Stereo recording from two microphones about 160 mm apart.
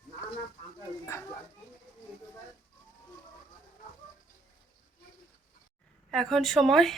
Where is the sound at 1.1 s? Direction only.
15° left (ahead or behind).